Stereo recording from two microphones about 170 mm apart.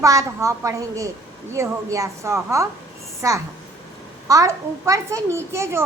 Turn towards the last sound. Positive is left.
turn(degrees=-15)  # may be behind; listen again after turning